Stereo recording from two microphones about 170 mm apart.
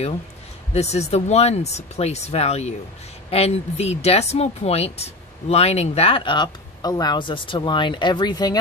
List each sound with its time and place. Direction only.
0.7 s speech: 40° left (ahead or behind)